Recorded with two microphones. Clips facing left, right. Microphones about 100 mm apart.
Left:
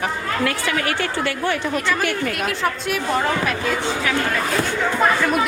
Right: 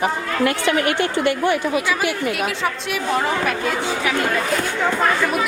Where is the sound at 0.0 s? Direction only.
20° right (ahead or behind).